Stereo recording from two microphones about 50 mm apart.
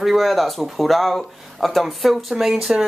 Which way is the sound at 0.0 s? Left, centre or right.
Centre.